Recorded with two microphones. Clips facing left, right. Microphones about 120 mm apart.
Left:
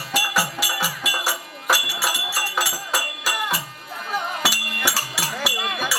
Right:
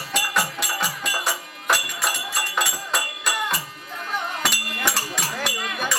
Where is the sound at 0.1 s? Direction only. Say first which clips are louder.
Left 1 dB; 5° left (ahead or behind).